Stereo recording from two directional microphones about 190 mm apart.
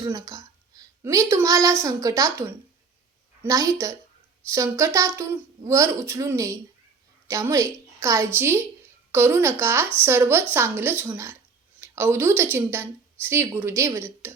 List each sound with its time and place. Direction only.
0.0 s speech: 20° right (ahead or behind)
3.4 s speech: 15° right (ahead or behind)